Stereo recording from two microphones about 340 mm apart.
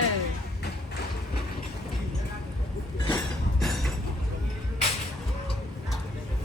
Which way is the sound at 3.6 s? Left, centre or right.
Centre.